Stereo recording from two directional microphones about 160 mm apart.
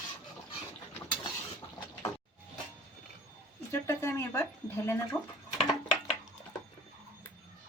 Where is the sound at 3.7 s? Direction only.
15° left (ahead or behind).